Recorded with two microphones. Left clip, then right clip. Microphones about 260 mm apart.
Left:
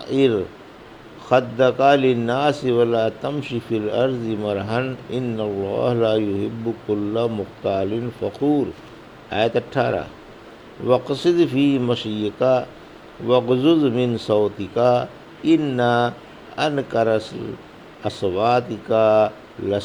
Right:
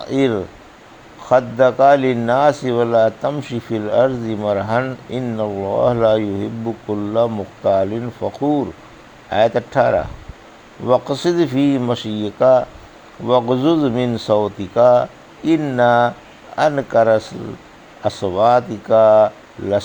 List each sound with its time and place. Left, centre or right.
0.0 s speech: right